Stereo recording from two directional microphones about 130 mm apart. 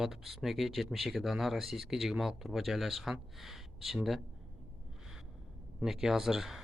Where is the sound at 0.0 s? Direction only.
Centre (ahead or behind).